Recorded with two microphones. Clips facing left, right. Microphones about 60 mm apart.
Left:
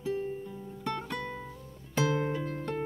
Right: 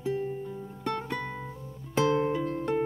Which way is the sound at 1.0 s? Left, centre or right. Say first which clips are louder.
Right 2 dB; centre.